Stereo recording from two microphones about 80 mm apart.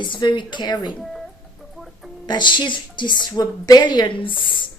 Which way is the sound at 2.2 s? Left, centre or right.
Left.